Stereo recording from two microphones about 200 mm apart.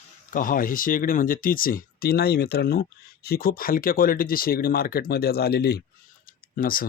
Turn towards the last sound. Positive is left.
turn(degrees=45)  # may be behind; listen again after turning